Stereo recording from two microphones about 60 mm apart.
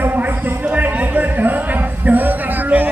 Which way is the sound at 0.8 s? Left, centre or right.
Right.